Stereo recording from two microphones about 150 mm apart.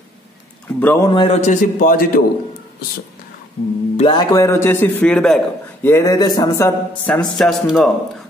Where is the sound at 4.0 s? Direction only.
30° left (ahead or behind); by 5.4 s 5° left (ahead or behind).